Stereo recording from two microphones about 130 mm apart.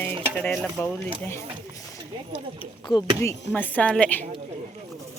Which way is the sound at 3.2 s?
20° left (ahead or behind).